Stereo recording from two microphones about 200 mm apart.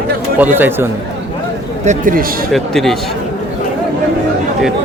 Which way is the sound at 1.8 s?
40° right (ahead or behind).